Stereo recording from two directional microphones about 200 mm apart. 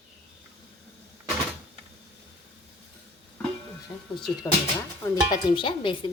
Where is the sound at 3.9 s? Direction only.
20° left (ahead or behind).